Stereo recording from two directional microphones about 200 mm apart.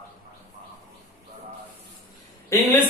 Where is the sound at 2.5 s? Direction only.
15° left (ahead or behind).